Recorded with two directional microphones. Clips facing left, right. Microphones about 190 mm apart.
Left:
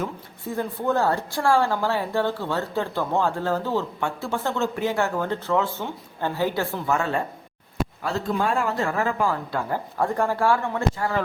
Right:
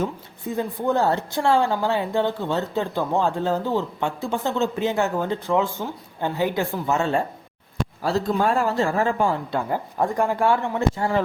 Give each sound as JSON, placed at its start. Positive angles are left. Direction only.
{"t": 0.0, "sound": "a woman's voice", "side_deg": -20}
{"t": 8.0, "sound": "speech", "side_deg": -40}